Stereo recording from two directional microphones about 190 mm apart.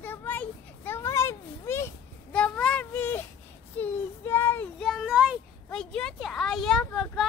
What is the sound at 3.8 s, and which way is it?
Child singing, 10° left (ahead or behind).